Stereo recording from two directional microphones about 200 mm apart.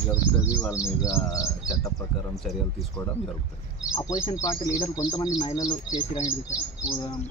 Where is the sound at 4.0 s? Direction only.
15° left (ahead or behind).